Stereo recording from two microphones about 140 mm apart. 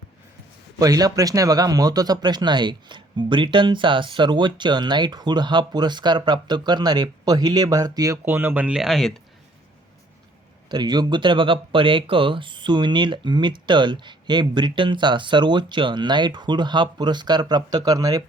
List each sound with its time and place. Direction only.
0.8 s speech: 25° right (ahead or behind)
8.2 s speech: 15° right (ahead or behind); by 9.2 s 5° left (ahead or behind)
10.7 s speech: 30° right (ahead or behind)